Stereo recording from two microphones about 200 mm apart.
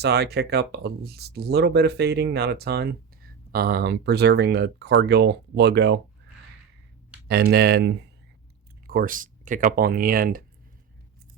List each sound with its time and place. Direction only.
0.0 s speech: 55° right (ahead or behind)
7.3 s speech: 55° right (ahead or behind)
8.9 s speech: 45° right (ahead or behind)